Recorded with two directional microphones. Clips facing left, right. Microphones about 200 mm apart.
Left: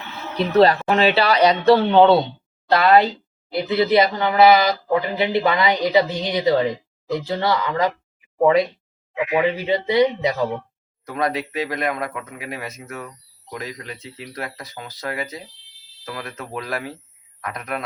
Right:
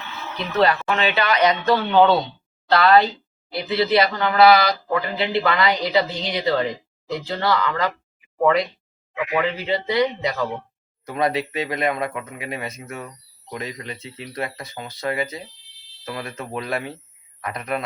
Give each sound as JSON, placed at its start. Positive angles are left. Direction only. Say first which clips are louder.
{"t": 0.3, "sound": "speech", "louder": "left 5 dB", "side_deg": 35}
{"t": 9.1, "sound": "speech", "louder": "left 3 dB", "side_deg": 25}
{"t": 11.0, "sound": "speech", "louder": "right 1 dB", "side_deg": 0}